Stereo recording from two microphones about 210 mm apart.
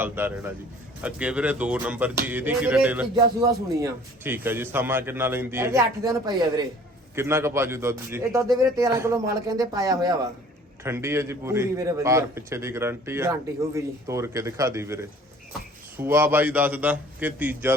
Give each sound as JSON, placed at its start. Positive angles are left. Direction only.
{"t": 0.0, "sound": "a man's voice", "side_deg": -10}
{"t": 7.2, "sound": "a man's voice", "side_deg": -10}